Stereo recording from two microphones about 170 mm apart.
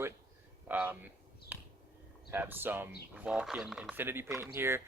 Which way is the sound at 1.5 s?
10° right (ahead or behind).